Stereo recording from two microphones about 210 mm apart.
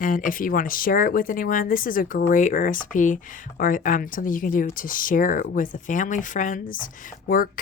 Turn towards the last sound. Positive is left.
turn(degrees=45)  # may be behind; listen again after turning